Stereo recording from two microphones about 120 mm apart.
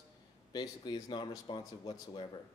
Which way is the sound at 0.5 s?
35° left (ahead or behind).